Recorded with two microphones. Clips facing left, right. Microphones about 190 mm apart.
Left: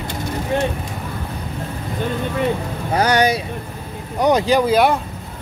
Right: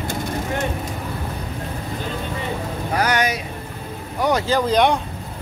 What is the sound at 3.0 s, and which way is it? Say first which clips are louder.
Vehicle: left 5 dB; 30° left (ahead or behind).